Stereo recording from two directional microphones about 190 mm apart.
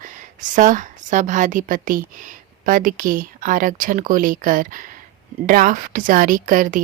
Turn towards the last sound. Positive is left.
turn(degrees=-45)  # may be behind; listen again after turning